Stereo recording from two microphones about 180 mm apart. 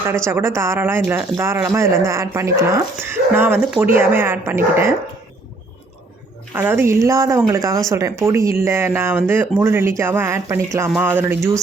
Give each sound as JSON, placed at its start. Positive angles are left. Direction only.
{"t": 0.3, "sound": "speech", "side_deg": -15}
{"t": 6.5, "sound": "speech", "side_deg": -10}